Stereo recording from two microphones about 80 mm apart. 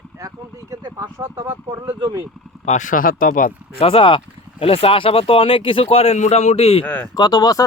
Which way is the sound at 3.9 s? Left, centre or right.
Left.